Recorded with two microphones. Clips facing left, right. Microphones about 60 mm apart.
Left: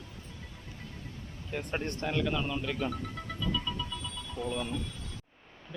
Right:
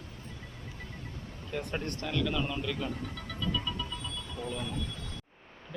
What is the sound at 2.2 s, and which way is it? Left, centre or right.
Speech, centre.